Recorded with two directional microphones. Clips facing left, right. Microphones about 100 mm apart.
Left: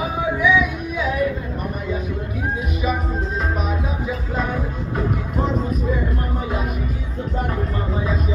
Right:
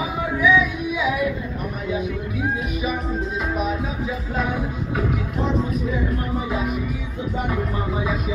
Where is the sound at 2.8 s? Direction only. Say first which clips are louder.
Left 1 dB; 5° right (ahead or behind).